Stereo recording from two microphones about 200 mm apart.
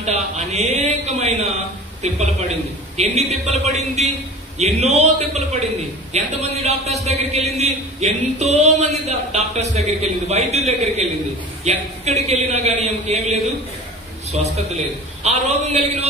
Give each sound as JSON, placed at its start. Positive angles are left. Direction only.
{"t": 0.0, "sound": "a sound", "side_deg": -35}
{"t": 2.0, "sound": "a man's voice", "side_deg": -35}
{"t": 15.2, "sound": "a man's voice", "side_deg": -35}